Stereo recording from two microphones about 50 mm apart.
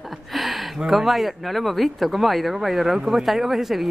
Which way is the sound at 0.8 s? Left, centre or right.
Centre.